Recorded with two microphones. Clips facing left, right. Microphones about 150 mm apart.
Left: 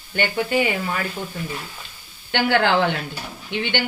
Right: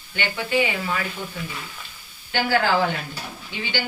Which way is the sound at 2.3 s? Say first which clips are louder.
Left 2 dB; 70° left (ahead or behind).